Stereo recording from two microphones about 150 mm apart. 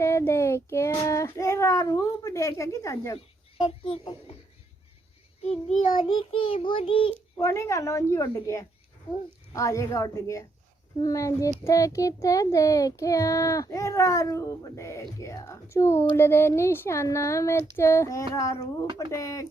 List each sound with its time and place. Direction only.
0.0 s speech: 20° left (ahead or behind)
3.2 s speech: 40° left (ahead or behind)
6.0 s child singing: 35° left (ahead or behind)
7.3 s speech: 20° left (ahead or behind)